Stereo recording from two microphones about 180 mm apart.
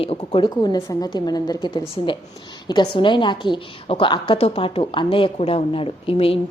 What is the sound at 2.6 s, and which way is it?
A woman's voice, 25° left (ahead or behind).